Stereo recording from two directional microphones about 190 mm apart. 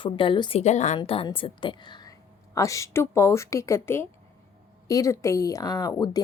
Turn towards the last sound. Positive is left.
turn(degrees=20)  # may be behind; listen again after turning